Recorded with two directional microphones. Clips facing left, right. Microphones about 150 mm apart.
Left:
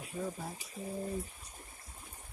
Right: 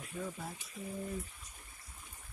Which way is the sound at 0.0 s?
35° left (ahead or behind).